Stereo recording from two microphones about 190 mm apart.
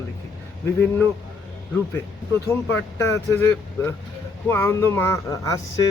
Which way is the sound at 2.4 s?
15° left (ahead or behind).